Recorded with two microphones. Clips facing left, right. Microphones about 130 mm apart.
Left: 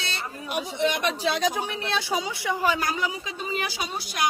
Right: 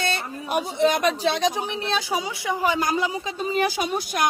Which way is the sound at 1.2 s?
25° right (ahead or behind).